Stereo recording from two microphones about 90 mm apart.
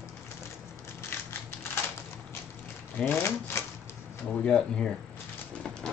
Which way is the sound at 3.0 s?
25° left (ahead or behind).